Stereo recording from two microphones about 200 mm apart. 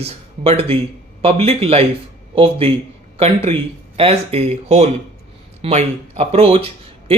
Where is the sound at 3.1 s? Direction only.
30° right (ahead or behind).